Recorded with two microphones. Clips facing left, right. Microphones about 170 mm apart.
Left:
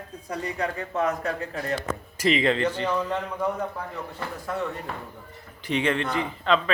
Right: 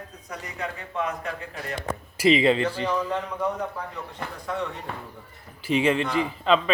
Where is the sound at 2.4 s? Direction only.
10° right (ahead or behind).